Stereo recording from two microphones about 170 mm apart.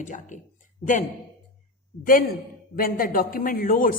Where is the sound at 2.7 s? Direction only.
55° left (ahead or behind).